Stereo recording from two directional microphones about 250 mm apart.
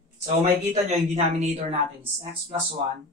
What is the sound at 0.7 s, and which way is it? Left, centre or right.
A man's voice, right.